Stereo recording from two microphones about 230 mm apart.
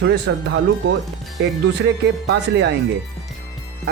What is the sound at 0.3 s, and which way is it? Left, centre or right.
Speech, right.